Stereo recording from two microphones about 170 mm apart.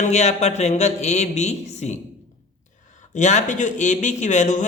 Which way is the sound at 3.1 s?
45° left (ahead or behind).